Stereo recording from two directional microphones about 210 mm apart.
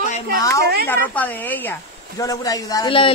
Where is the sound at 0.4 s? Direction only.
15° left (ahead or behind).